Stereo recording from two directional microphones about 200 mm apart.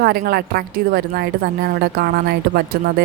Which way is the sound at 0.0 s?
50° right (ahead or behind).